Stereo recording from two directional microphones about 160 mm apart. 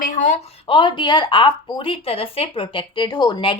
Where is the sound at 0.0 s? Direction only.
50° left (ahead or behind).